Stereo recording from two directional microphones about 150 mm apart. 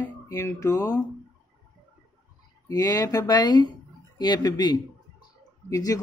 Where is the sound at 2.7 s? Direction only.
25° left (ahead or behind).